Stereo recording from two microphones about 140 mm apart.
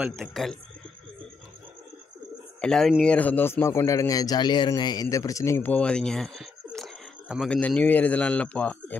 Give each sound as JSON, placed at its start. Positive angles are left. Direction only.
{"t": 0.2, "sound": "a man's voice", "side_deg": 0}
{"t": 2.6, "sound": "a man's voice", "side_deg": 5}